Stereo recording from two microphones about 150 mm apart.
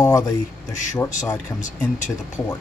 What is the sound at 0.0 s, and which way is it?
Speech, 25° left (ahead or behind).